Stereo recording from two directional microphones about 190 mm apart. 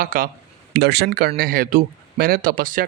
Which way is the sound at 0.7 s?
60° right (ahead or behind).